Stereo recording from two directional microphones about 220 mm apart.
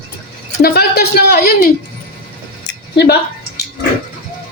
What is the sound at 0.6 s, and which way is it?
Speech, 45° left (ahead or behind).